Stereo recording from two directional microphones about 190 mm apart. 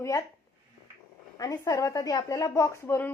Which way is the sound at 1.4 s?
20° left (ahead or behind).